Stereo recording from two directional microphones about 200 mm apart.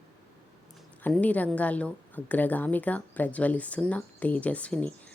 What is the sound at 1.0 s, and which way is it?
A woman's voice, 5° left (ahead or behind).